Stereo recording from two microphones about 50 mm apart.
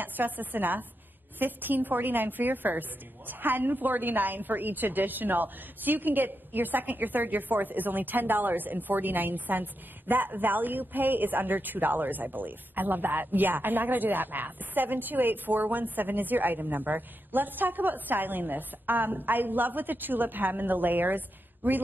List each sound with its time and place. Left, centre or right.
0.0 s a woman's voice: right